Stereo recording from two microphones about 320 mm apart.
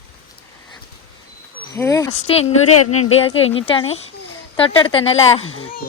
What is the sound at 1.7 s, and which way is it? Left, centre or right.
Speech, centre.